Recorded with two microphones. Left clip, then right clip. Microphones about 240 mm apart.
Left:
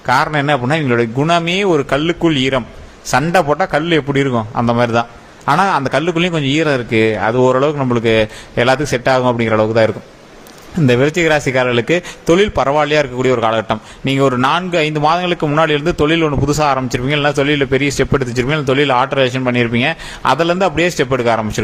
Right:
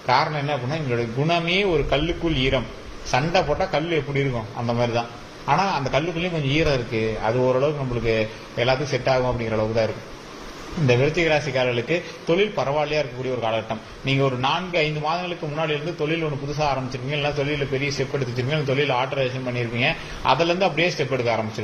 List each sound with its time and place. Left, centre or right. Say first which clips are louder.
0.0 s a man's voice: left 7 dB; left
10.8 s a man's voice: left 7 dB; left